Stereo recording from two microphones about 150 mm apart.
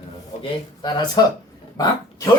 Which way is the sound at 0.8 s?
30° left (ahead or behind).